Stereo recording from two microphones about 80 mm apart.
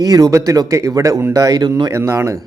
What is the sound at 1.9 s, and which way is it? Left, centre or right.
Speech, right.